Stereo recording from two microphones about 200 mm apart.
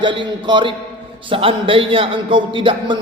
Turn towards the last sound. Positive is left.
turn(degrees=-25)  # may be behind; listen again after turning